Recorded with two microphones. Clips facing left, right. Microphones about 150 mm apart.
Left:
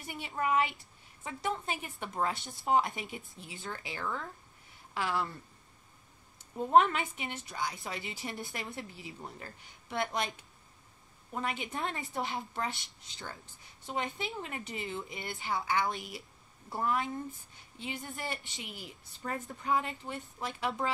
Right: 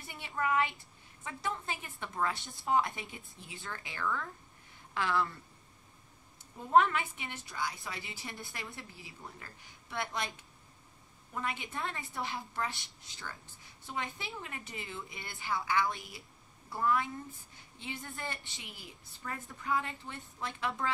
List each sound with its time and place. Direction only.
0.0 s a woman's voice: 20° left (ahead or behind)
4.9 s speech: 10° left (ahead or behind)
6.7 s a woman's voice: 20° left (ahead or behind)
11.3 s a woman's voice: 20° left (ahead or behind)